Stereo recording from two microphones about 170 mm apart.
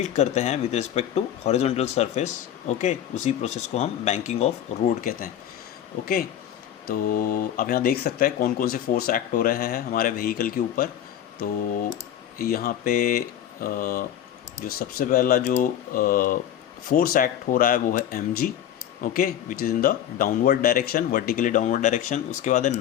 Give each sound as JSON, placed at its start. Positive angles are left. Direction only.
{"t": 0.0, "sound": "speech", "side_deg": 40}
{"t": 4.9, "sound": "speech", "side_deg": 55}
{"t": 6.8, "sound": "speech", "side_deg": 55}
{"t": 12.4, "sound": "speech", "side_deg": 60}